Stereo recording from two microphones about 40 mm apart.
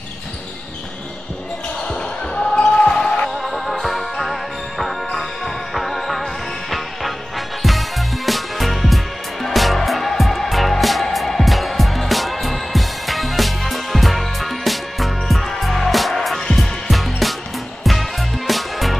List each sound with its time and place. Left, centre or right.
1.9 s basketball bounce: centre
3.3 s music: centre
18.5 s music: centre